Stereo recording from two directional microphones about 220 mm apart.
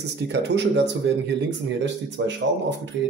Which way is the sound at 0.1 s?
50° right (ahead or behind).